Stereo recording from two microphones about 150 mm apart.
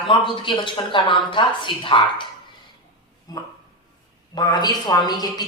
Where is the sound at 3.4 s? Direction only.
25° left (ahead or behind).